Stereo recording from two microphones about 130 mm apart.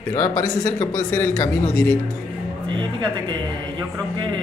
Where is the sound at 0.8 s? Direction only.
20° left (ahead or behind).